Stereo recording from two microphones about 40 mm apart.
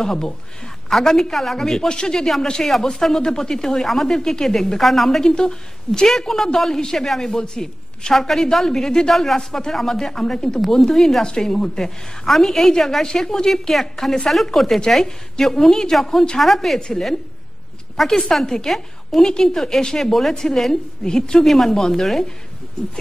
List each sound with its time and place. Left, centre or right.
0.0 s a woman's voice: centre
2.7 s a woman's voice: centre
10.6 s a woman's voice: centre